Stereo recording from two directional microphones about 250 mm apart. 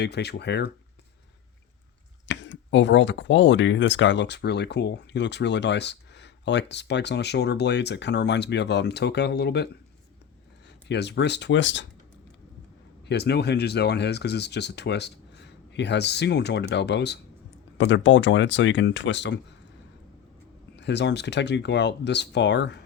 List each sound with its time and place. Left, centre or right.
0.0 s speech: left
2.2 s speech: left
10.8 s speech: left
13.1 s speech: left
20.7 s speech: left